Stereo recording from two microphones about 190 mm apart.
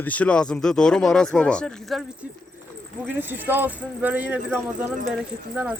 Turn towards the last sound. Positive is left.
turn(degrees=-10)  # may be behind; listen again after turning